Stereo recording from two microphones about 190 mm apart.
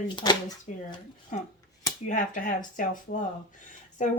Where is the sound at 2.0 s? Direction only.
45° left (ahead or behind).